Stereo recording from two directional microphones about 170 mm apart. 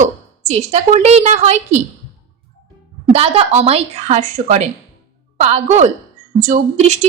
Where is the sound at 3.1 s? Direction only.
35° right (ahead or behind).